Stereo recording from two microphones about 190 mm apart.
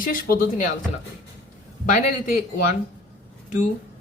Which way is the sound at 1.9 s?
40° left (ahead or behind).